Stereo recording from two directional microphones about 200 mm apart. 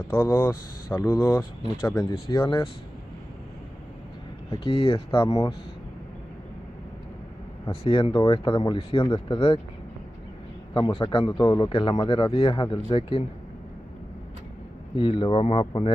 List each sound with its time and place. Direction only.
0.1 s speech: 10° left (ahead or behind)
4.5 s speech: 30° left (ahead or behind)
7.7 s speech: 30° left (ahead or behind)
10.7 s speech: 25° left (ahead or behind)
15.0 s speech: 25° left (ahead or behind)